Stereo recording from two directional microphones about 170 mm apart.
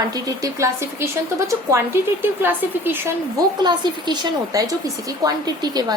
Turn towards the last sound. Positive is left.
turn(degrees=-20)  # may be behind; listen again after turning